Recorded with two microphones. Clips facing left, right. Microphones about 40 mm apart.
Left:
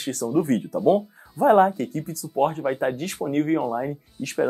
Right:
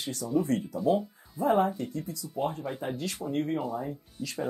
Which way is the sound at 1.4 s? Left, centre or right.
Left.